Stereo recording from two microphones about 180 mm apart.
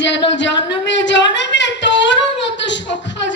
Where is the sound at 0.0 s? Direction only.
80° left.